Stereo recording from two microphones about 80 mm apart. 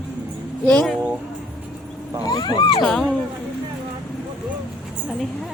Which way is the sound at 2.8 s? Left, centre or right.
Centre.